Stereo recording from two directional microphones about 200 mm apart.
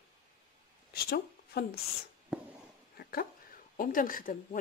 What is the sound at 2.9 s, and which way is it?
Dog, 50° left (ahead or behind).